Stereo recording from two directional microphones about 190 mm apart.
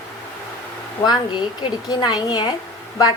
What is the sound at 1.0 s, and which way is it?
A woman's voice, 20° left (ahead or behind).